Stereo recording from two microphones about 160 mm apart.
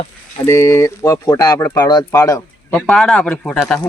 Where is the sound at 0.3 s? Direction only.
15° left (ahead or behind).